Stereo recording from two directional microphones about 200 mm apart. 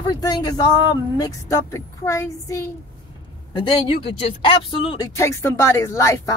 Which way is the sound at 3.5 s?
25° left (ahead or behind).